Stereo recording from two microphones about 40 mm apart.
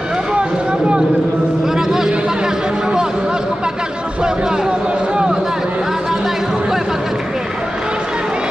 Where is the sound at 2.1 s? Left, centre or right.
Right.